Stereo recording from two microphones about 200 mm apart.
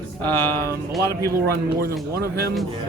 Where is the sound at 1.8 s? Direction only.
55° right (ahead or behind).